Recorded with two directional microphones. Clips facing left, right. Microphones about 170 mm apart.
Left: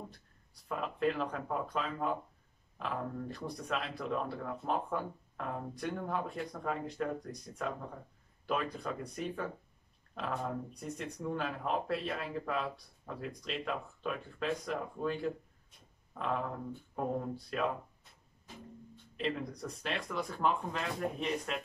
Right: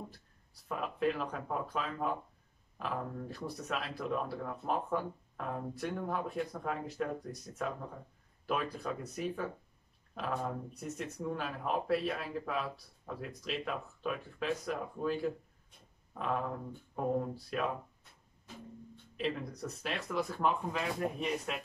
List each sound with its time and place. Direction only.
0.7 s speech: centre (ahead or behind)
16.9 s speech: centre (ahead or behind)
19.1 s speech: centre (ahead or behind)